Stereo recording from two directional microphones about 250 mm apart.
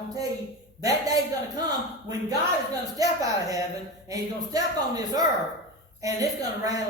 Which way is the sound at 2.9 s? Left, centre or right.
Centre.